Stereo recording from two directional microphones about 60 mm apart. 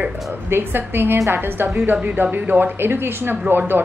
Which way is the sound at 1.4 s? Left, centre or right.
Right.